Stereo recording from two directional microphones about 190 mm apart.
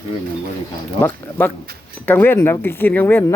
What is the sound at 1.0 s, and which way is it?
Speech, 10° left (ahead or behind).